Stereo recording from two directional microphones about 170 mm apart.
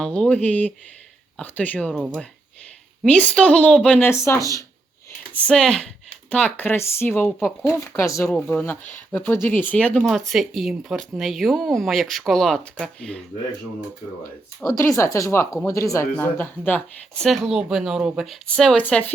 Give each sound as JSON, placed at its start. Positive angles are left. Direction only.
{"t": 0.0, "sound": "speech", "side_deg": 5}
{"t": 5.5, "sound": "speech", "side_deg": 5}
{"t": 7.6, "sound": "speech", "side_deg": 15}
{"t": 8.3, "sound": "speech", "side_deg": 5}
{"t": 14.7, "sound": "speech", "side_deg": 20}